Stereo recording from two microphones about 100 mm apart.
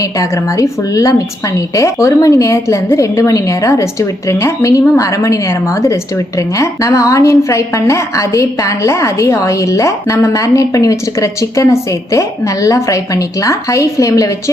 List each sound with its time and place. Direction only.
0.0 s a woman's voice: 35° left (ahead or behind)